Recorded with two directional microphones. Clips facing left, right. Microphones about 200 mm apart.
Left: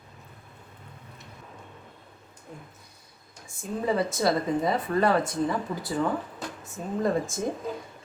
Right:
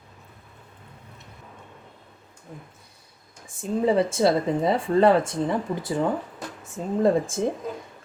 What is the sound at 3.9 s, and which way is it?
Speech, 25° right (ahead or behind).